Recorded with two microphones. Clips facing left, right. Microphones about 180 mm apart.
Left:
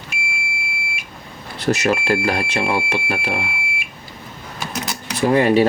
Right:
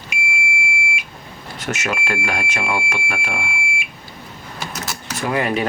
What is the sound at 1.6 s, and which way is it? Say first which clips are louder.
Speech: left 7 dB; 35° left (ahead or behind).